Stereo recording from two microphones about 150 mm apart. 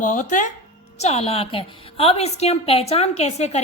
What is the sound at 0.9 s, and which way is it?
A woman's voice, 45° left (ahead or behind).